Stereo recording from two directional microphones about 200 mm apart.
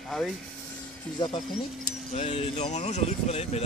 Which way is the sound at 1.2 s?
20° left (ahead or behind).